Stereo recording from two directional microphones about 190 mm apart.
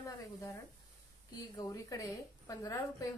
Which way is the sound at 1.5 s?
15° left (ahead or behind).